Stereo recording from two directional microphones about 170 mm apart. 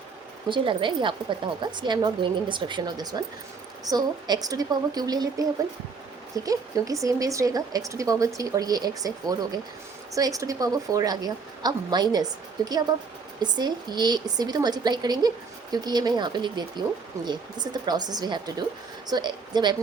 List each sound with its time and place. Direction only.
0.4 s speech: 30° right (ahead or behind)
13.4 s speech: 25° right (ahead or behind)